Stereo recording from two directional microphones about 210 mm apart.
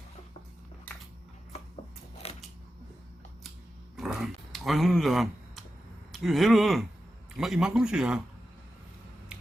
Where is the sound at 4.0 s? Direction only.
Centre (ahead or behind).